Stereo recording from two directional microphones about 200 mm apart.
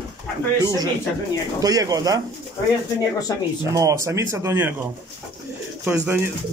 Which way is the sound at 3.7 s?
15° right (ahead or behind).